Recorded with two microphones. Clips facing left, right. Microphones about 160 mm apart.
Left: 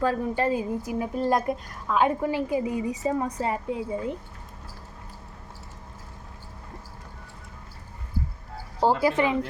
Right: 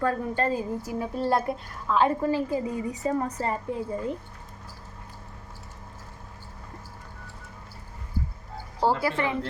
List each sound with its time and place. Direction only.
0.0 s a woman's voice: 15° left (ahead or behind)
8.8 s a woman's voice: 15° left (ahead or behind)